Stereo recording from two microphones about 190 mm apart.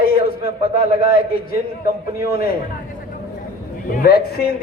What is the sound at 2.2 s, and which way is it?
Speech, 50° left (ahead or behind).